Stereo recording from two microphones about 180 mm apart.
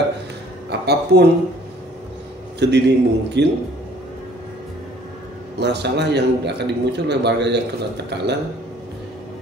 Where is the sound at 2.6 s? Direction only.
70° right (ahead or behind).